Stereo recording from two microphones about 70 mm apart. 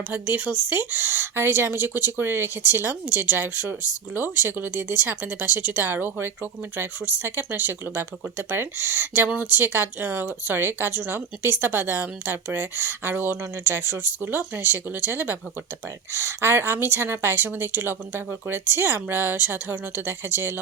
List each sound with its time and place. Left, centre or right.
0.1 s a woman's voice: right